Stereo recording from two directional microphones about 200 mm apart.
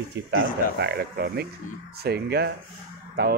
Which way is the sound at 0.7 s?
55° right (ahead or behind).